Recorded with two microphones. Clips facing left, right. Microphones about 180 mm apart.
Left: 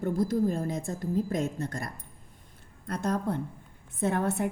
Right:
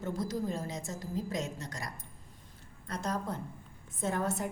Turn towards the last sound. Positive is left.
turn(degrees=60)  # may be behind; listen again after turning